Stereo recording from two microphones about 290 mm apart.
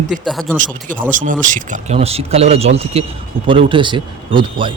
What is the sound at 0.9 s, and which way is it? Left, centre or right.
Speech, right.